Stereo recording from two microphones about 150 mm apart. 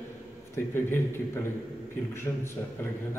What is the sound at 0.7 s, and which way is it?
A man's voice, 15° left (ahead or behind).